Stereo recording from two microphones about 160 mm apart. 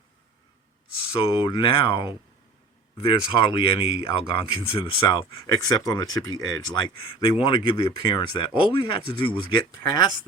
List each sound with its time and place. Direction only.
1.2 s speech: 30° left (ahead or behind)